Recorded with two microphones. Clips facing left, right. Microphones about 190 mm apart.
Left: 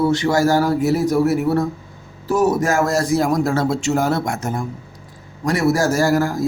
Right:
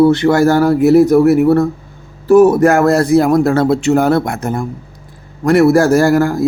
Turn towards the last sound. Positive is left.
turn(degrees=-60)  # may be behind; listen again after turning